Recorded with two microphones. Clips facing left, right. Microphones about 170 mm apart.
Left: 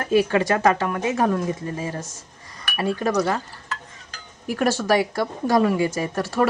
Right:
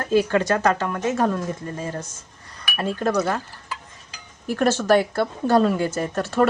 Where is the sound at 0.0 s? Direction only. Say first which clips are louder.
Even; 15° left (ahead or behind).